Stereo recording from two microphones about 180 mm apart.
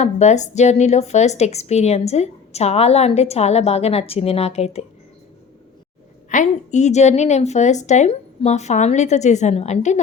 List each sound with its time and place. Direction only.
0.0 s a woman's voice: 40° left (ahead or behind)
6.3 s a woman's voice: 40° left (ahead or behind)